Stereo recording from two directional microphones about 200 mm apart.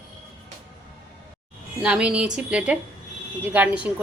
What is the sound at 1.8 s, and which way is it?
A woman's voice, 5° right (ahead or behind).